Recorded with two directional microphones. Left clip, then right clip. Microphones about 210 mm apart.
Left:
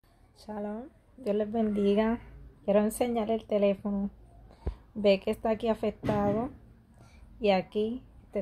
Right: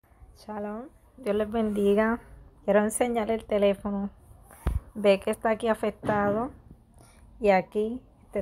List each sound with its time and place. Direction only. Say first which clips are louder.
0.4 s a woman's voice: right 2 dB; 10° right (ahead or behind)